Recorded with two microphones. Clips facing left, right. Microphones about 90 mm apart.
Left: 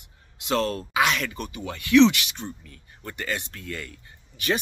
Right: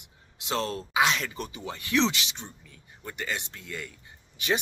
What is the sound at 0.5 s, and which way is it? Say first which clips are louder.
Speech: left 5 dB; 20° right (ahead or behind).